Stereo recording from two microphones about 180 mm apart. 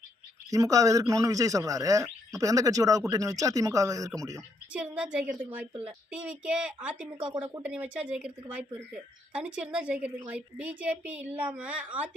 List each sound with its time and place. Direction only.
0.5 s speech: 20° right (ahead or behind)
4.7 s a woman's voice: 5° right (ahead or behind)